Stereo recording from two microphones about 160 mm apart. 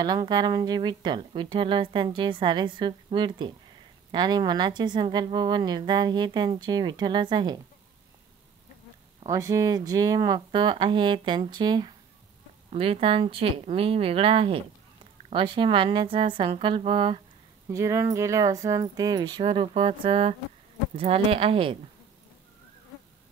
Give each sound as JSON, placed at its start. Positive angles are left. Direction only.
{"t": 0.0, "sound": "speech", "side_deg": -25}
{"t": 9.2, "sound": "a woman's voice", "side_deg": -20}
{"t": 17.6, "sound": "a woman's voice", "side_deg": -20}